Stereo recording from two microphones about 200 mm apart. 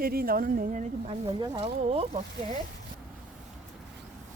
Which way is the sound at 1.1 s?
30° right (ahead or behind).